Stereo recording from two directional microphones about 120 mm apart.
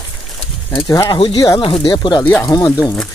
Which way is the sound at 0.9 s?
30° left (ahead or behind).